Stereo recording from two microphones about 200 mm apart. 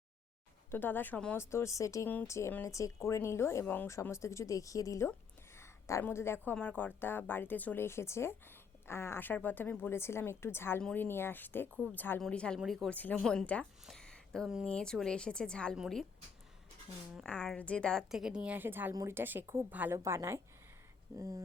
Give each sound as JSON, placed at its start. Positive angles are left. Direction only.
{"t": 0.7, "sound": "a woman's voice", "side_deg": 10}
{"t": 17.2, "sound": "a woman's voice", "side_deg": 5}